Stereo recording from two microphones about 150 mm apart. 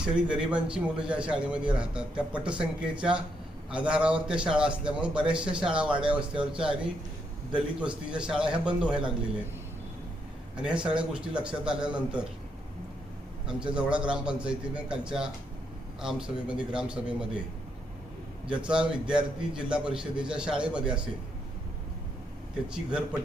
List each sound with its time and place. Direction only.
0.0 s a man's voice: 5° right (ahead or behind)
10.6 s a man's voice: 5° right (ahead or behind)
13.5 s a man's voice: 5° right (ahead or behind)
18.4 s a man's voice: 5° right (ahead or behind)
22.7 s a man's voice: 5° right (ahead or behind)